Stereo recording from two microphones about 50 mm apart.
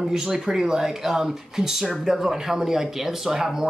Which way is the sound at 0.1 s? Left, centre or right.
Centre.